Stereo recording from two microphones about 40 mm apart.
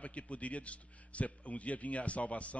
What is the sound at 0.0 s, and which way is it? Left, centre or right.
Speech, left.